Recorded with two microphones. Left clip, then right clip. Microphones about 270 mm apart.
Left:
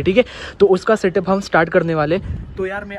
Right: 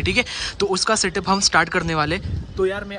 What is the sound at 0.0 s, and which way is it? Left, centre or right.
Speech, centre.